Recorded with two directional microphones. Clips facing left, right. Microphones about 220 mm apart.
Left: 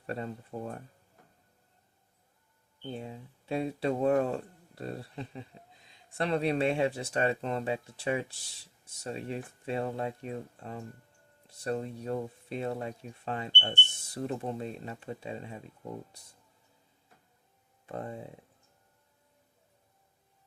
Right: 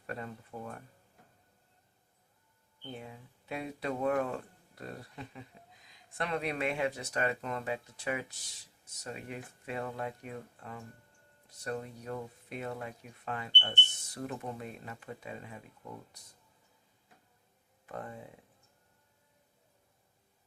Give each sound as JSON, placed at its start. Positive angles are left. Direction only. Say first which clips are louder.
{"t": 0.1, "sound": "speech", "louder": "left 5 dB", "side_deg": 30}
{"t": 2.8, "sound": "speech", "louder": "left 5 dB", "side_deg": 30}
{"t": 17.8, "sound": "speech", "louder": "left 4 dB", "side_deg": 25}